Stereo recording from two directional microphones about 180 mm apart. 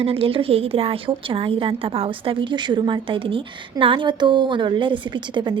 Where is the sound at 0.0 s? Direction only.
30° right (ahead or behind).